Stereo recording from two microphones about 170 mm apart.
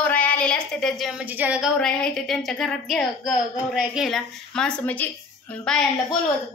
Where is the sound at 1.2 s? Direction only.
10° right (ahead or behind).